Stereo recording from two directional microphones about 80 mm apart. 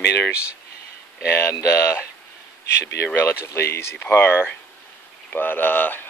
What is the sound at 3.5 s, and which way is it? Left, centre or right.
Speech, left.